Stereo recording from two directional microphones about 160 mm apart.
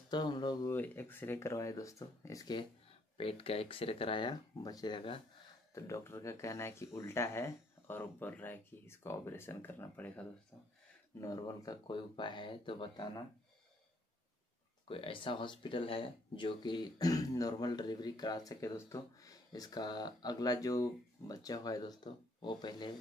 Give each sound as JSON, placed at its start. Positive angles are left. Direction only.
{"t": 0.1, "sound": "speech", "side_deg": 30}
{"t": 0.7, "sound": "speech", "side_deg": 15}
{"t": 3.2, "sound": "speech", "side_deg": 35}
{"t": 5.8, "sound": "speech", "side_deg": 15}
{"t": 11.1, "sound": "speech", "side_deg": 20}
{"t": 14.9, "sound": "speech", "side_deg": 35}